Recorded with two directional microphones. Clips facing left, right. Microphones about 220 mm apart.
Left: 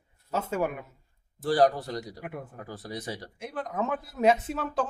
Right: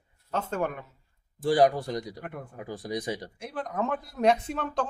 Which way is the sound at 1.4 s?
10° right (ahead or behind).